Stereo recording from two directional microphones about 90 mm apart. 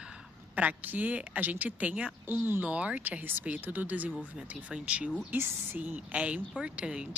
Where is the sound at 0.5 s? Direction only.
15° right (ahead or behind).